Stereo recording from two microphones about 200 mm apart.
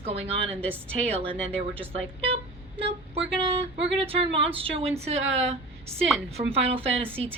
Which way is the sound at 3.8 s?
30° right (ahead or behind).